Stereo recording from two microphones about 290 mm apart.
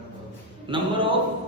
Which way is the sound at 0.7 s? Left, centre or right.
Centre.